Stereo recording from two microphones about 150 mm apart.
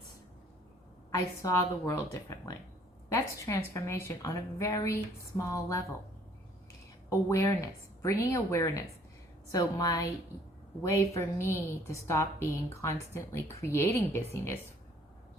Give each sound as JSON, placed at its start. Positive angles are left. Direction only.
{"t": 1.1, "sound": "a woman's voice", "side_deg": 20}
{"t": 7.1, "sound": "a woman's voice", "side_deg": 20}
{"t": 11.1, "sound": "a woman's voice", "side_deg": 15}